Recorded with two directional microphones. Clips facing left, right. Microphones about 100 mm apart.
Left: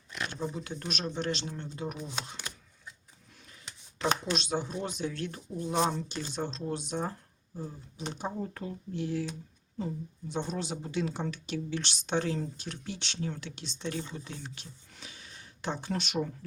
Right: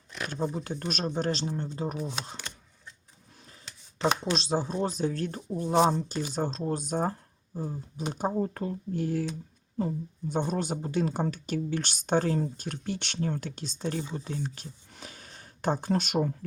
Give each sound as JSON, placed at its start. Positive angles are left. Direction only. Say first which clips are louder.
{"t": 0.3, "sound": "speech", "louder": "right 7 dB", "side_deg": -45}
{"t": 4.4, "sound": "speech", "louder": "right 4 dB", "side_deg": -35}